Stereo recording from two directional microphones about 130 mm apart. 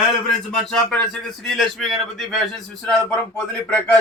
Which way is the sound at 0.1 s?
5° left (ahead or behind).